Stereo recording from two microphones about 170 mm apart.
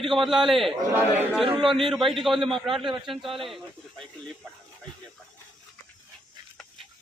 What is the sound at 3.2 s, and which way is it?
Speech, 35° right (ahead or behind).